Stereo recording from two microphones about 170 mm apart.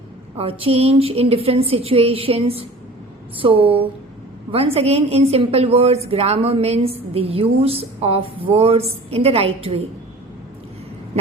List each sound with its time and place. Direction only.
0.3 s a woman's voice: 35° right (ahead or behind)